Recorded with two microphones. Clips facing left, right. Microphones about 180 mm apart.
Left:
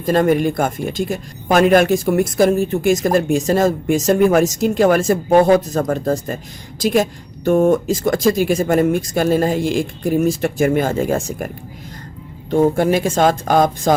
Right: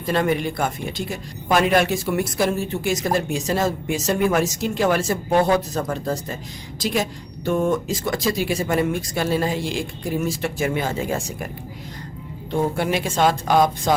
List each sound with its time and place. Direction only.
0.0 s speech: 45° left (ahead or behind)